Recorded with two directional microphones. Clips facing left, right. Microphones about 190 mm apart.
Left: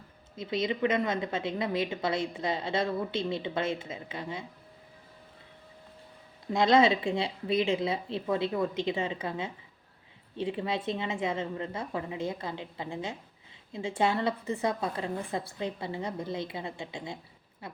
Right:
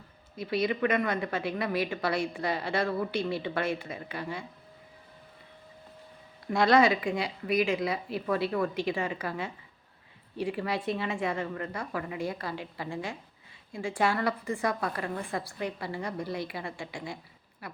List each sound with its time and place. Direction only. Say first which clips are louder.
0.3 s speech: right 2 dB; 20° left (ahead or behind)
6.5 s speech: even; 20° left (ahead or behind)